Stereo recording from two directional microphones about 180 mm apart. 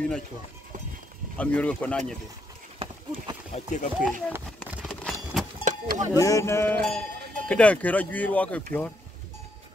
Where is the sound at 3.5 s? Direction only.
40° left (ahead or behind).